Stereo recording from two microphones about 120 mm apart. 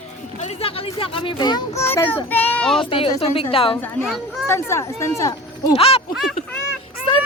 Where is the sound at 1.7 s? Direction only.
20° left (ahead or behind).